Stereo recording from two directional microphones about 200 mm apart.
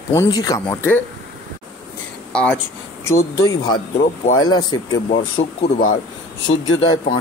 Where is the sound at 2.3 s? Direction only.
5° left (ahead or behind).